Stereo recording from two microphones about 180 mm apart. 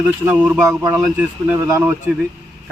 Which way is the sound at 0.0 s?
10° right (ahead or behind).